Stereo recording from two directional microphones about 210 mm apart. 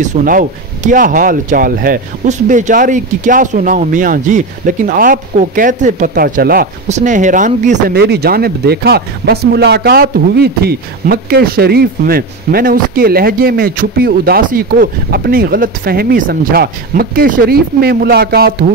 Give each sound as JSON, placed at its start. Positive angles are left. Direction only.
{"t": 0.0, "sound": "speech", "side_deg": -40}
{"t": 7.9, "sound": "speech", "side_deg": -50}